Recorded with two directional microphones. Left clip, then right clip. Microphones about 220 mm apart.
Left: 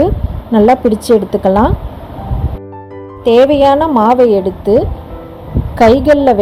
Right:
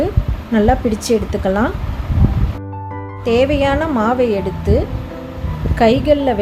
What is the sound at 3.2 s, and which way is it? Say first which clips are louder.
A woman's voice: left 7 dB; 30° left (ahead or behind).